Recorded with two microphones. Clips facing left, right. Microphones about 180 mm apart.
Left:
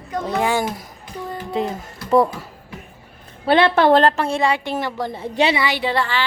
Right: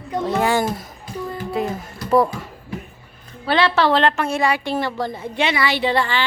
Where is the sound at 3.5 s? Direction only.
55° left (ahead or behind); by 4.9 s 20° left (ahead or behind).